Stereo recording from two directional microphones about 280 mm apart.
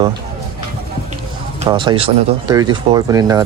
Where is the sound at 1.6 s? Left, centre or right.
Centre.